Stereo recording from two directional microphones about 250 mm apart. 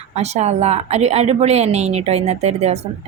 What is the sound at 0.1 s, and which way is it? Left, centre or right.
A woman's voice, right.